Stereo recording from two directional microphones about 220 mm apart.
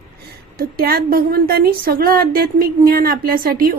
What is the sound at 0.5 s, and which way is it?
A woman's voice, 45° right (ahead or behind).